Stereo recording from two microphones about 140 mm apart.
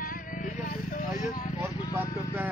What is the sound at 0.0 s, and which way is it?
Music, 80° left.